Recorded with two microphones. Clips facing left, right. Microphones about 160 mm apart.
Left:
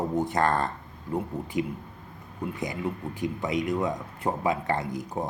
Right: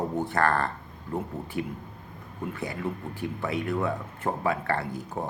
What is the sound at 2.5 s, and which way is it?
Speech, 15° left (ahead or behind).